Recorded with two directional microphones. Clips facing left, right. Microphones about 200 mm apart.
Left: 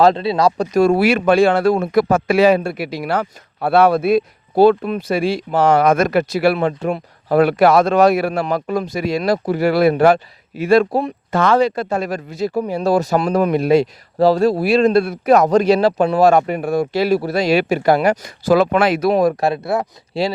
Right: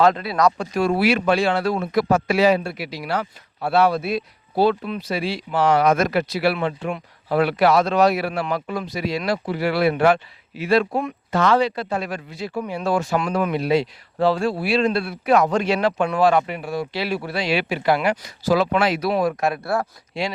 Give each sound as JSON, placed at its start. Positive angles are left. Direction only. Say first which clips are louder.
{"t": 0.0, "sound": "speech", "louder": "left 4 dB", "side_deg": 30}
{"t": 19.6, "sound": "speech", "louder": "left 3 dB", "side_deg": 20}